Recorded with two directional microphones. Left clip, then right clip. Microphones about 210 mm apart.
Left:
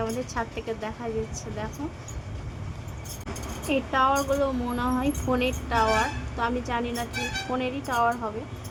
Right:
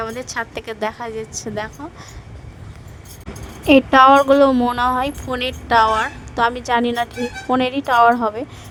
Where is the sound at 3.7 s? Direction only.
50° right (ahead or behind).